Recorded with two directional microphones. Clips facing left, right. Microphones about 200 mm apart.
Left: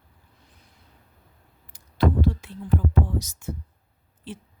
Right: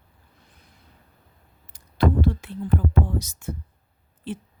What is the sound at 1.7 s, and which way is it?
Speech, 60° right (ahead or behind).